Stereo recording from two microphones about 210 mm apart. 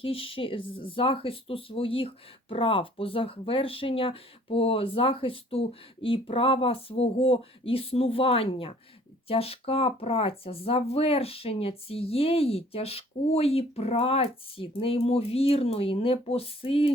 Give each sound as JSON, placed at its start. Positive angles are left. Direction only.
{"t": 0.0, "sound": "speech", "side_deg": 25}